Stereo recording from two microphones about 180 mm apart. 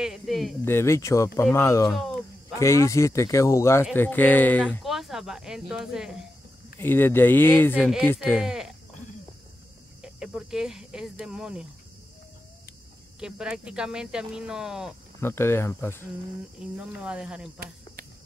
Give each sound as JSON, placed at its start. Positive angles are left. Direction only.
{"t": 0.0, "sound": "speech", "side_deg": 0}
{"t": 0.7, "sound": "speech", "side_deg": 15}
{"t": 1.9, "sound": "speech", "side_deg": 0}
{"t": 2.5, "sound": "speech", "side_deg": 15}
{"t": 4.9, "sound": "speech", "side_deg": 0}
{"t": 6.8, "sound": "speech", "side_deg": 10}
{"t": 8.4, "sound": "speech", "side_deg": -5}
{"t": 10.0, "sound": "speech", "side_deg": -5}
{"t": 13.2, "sound": "speech", "side_deg": -5}
{"t": 15.1, "sound": "speech", "side_deg": 15}
{"t": 16.7, "sound": "speech", "side_deg": -5}